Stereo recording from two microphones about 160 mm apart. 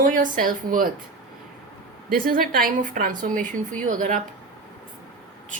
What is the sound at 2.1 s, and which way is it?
A woman's voice, 65° right (ahead or behind).